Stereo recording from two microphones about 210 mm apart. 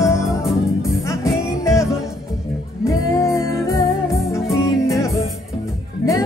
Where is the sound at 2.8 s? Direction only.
15° left (ahead or behind).